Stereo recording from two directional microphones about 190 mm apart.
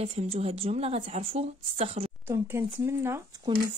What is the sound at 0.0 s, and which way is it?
A woman's voice, 30° right (ahead or behind).